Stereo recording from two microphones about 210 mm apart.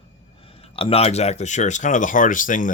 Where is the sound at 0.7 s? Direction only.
25° left (ahead or behind).